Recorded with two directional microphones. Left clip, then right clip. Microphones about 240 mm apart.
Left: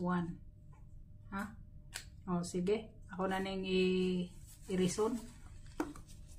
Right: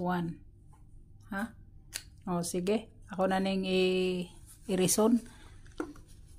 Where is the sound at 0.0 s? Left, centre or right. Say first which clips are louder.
Right 5 dB; right.